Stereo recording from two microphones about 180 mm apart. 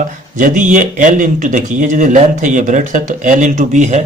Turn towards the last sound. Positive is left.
turn(degrees=-40)  # may be behind; listen again after turning